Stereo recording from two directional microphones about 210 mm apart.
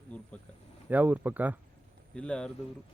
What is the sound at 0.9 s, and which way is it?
Speech, 5° right (ahead or behind).